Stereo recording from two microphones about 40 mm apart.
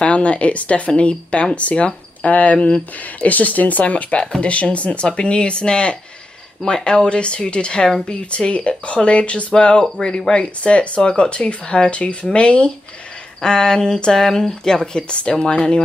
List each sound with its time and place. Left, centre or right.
0.0 s speech: left